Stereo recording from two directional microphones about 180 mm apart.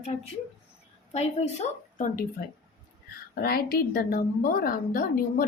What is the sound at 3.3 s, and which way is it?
A woman's voice, 60° left (ahead or behind).